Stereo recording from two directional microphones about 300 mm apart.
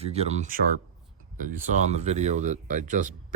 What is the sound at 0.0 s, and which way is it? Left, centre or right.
Speech, right.